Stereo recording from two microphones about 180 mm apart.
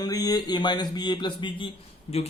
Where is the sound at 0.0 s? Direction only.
20° left (ahead or behind).